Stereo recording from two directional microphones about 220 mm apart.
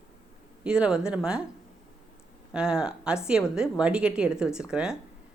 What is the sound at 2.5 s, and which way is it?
Speech, 5° right (ahead or behind).